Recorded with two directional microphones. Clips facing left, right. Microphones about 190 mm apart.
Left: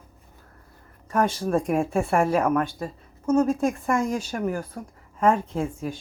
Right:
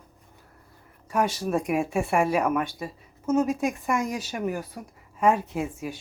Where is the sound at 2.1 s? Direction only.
15° right (ahead or behind).